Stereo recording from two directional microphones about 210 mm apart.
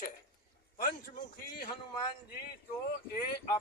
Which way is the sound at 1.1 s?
45° left (ahead or behind).